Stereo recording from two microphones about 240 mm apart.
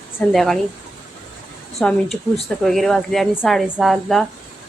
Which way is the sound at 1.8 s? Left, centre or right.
Centre.